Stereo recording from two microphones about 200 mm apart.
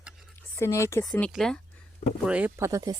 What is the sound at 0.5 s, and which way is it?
Speech, 15° left (ahead or behind).